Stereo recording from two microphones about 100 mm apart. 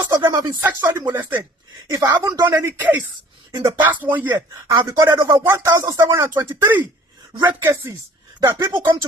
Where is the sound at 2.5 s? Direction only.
20° right (ahead or behind).